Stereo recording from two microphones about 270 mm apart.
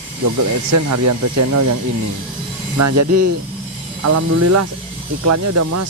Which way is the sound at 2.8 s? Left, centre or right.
Right.